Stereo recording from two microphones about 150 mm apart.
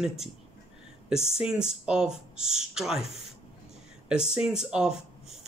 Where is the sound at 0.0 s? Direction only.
5° right (ahead or behind).